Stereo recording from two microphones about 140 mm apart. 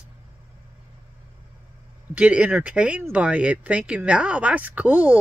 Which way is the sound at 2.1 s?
10° right (ahead or behind).